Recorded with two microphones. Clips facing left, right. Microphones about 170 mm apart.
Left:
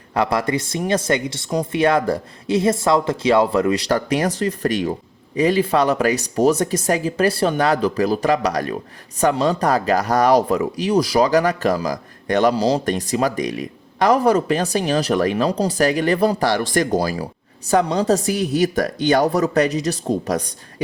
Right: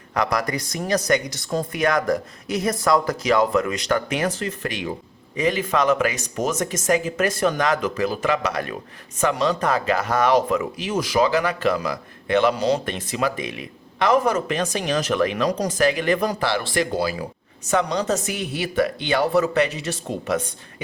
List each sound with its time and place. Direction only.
0.1 s speech: 30° left (ahead or behind)